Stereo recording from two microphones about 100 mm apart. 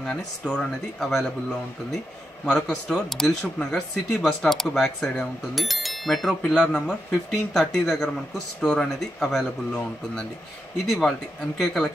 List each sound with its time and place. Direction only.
0.0 s speech: 10° left (ahead or behind)
2.4 s speech: 5° left (ahead or behind)
10.9 s speech: 5° left (ahead or behind)